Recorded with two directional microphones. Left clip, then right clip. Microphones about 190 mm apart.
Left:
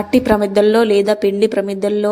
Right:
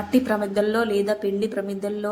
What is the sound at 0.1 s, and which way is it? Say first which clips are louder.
A woman's voice: left 9 dB; 35° left (ahead or behind).